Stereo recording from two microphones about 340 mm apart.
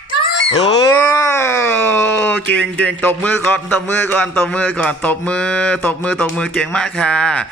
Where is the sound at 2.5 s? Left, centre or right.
Centre.